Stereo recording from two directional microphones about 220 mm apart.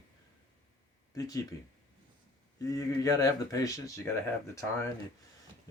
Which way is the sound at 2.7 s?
15° left (ahead or behind).